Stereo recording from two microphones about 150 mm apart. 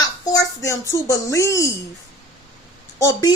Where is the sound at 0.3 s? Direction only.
20° left (ahead or behind).